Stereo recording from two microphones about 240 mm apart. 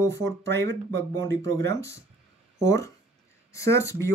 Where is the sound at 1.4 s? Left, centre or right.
Right.